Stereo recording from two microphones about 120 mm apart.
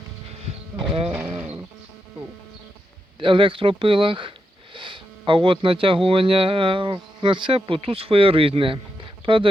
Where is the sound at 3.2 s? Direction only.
45° right (ahead or behind).